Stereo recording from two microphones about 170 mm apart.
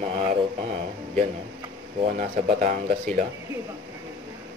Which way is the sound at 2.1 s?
50° right (ahead or behind).